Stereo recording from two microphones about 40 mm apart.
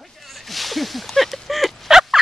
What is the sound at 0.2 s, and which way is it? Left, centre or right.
Fowl, centre.